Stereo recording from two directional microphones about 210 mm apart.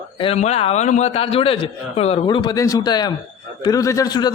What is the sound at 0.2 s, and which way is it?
A man's voice, 30° left (ahead or behind).